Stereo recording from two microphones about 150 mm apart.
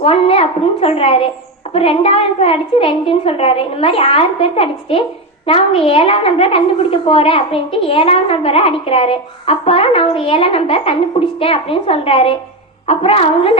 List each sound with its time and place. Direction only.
0.0 s a woman's voice: 40° left (ahead or behind)